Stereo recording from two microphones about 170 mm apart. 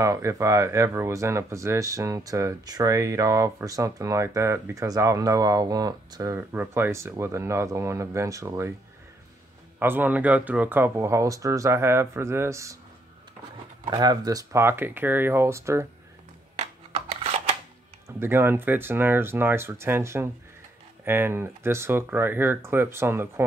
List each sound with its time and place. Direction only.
0.0 s speech: 15° right (ahead or behind)
9.8 s speech: 10° right (ahead or behind)
13.8 s speech: 25° right (ahead or behind)
16.5 s a sound: 35° right (ahead or behind)
18.0 s speech: 15° right (ahead or behind)